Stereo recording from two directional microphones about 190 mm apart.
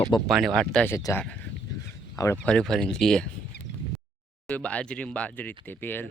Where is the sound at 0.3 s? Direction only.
Centre (ahead or behind).